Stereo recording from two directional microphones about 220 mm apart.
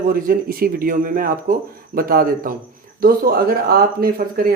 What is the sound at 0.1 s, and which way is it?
Speech, 40° right (ahead or behind).